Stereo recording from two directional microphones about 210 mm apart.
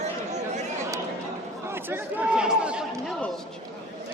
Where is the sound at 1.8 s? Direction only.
10° right (ahead or behind).